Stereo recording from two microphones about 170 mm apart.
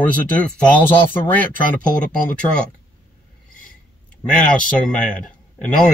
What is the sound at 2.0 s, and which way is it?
Speech, 50° left (ahead or behind).